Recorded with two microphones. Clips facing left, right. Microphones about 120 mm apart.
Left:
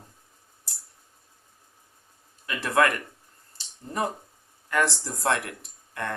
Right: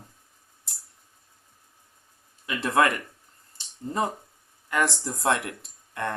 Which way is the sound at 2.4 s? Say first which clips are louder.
Even; 20° right (ahead or behind).